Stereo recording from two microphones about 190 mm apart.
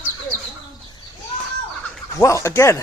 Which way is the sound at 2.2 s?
15° left (ahead or behind).